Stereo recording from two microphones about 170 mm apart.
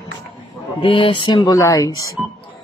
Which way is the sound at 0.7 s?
30° left (ahead or behind).